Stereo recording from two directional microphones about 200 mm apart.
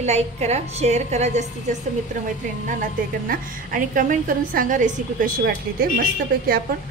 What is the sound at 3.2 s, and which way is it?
A woman's voice, 45° right (ahead or behind).